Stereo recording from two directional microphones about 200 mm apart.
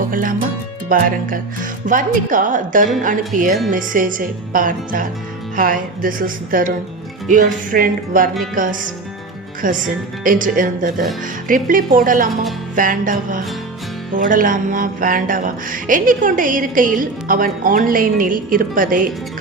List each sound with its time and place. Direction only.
0.1 s music: 45° right (ahead or behind)
1.9 s a woman's voice: 40° right (ahead or behind)
3.7 s music: 40° right (ahead or behind)
9.6 s a woman's voice: 40° right (ahead or behind)
11.4 s music: 45° right (ahead or behind)